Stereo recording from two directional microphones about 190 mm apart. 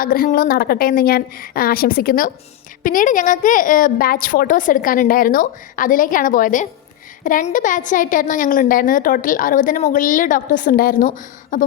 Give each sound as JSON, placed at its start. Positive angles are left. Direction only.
{"t": 0.0, "sound": "a woman's voice", "side_deg": 50}